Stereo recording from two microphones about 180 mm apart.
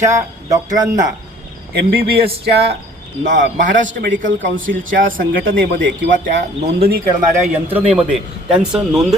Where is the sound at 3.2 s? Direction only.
80° right.